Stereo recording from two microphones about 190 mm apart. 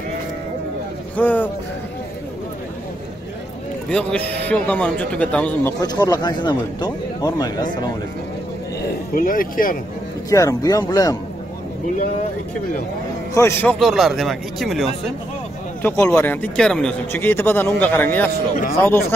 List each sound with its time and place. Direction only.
1.1 s speech: 10° left (ahead or behind)
3.9 s a man's voice: 5° left (ahead or behind); by 7.9 s 20° left (ahead or behind)
8.8 s speech: 45° left (ahead or behind)
10.3 s a man's voice: 15° left (ahead or behind)
13.3 s a man's voice: 15° left (ahead or behind)
15.8 s a man's voice: 10° left (ahead or behind)